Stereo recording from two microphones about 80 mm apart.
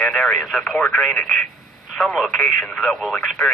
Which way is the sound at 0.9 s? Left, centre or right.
Centre.